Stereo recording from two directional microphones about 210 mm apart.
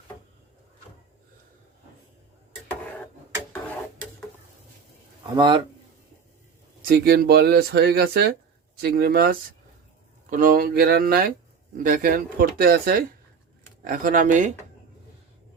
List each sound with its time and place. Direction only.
5.2 s speech: 20° right (ahead or behind)
6.8 s speech: 45° right (ahead or behind)